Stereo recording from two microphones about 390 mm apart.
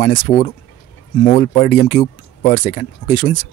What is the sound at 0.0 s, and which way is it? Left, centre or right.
Speech, centre.